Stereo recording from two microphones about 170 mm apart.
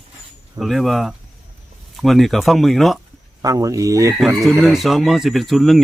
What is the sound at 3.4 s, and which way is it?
Speech, 20° right (ahead or behind).